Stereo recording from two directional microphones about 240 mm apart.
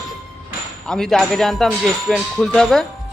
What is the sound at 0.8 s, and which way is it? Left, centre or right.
Speech, centre.